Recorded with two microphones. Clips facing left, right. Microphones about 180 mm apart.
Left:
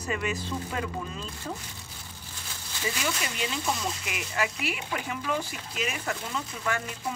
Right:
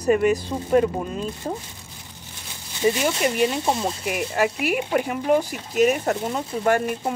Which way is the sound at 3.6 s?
30° right (ahead or behind).